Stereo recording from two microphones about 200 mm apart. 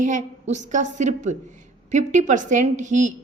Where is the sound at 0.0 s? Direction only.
40° right (ahead or behind).